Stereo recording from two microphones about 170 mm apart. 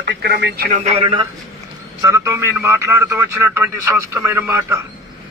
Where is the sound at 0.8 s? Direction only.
30° right (ahead or behind).